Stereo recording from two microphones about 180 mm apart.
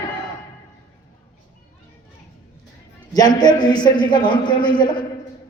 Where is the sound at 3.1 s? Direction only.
20° left (ahead or behind).